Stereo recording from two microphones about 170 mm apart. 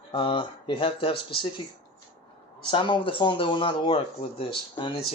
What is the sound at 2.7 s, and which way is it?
Speech, 25° left (ahead or behind).